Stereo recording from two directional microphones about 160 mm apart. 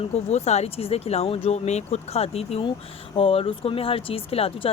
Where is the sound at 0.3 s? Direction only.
45° left (ahead or behind).